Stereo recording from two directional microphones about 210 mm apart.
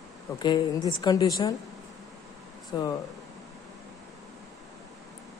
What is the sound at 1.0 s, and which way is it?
Speech, 15° left (ahead or behind).